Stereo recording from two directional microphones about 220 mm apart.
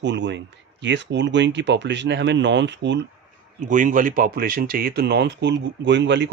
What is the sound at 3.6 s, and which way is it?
Speech, 35° right (ahead or behind).